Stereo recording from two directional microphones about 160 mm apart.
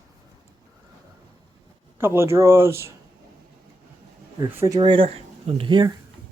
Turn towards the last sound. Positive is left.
turn(degrees=-25)  # may be behind; listen again after turning